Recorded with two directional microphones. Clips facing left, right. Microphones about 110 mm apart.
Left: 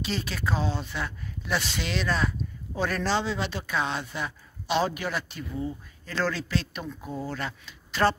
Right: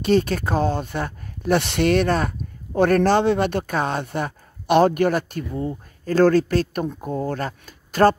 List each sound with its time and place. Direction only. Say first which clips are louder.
0.0 s speech: right 12 dB; 50° right (ahead or behind)